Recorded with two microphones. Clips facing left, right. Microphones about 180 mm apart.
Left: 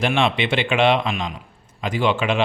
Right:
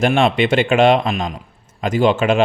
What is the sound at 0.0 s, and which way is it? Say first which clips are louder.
Speech: right 5 dB; 45° right (ahead or behind).